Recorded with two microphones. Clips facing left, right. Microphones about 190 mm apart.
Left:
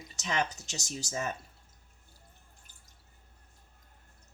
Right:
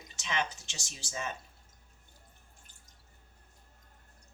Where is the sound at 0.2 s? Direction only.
40° left (ahead or behind).